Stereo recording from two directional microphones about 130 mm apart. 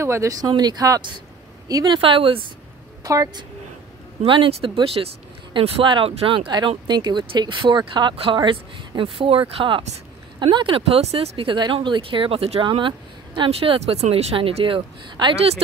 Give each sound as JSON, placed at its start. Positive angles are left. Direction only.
{"t": 0.0, "sound": "speech", "side_deg": -20}
{"t": 2.0, "sound": "speech", "side_deg": -40}
{"t": 3.0, "sound": "speech", "side_deg": -30}
{"t": 4.2, "sound": "speech", "side_deg": -45}